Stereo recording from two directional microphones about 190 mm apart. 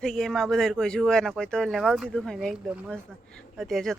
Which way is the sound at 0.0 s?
Centre (ahead or behind).